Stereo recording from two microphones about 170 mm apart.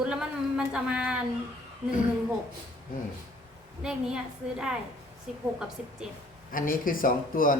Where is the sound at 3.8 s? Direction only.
5° right (ahead or behind).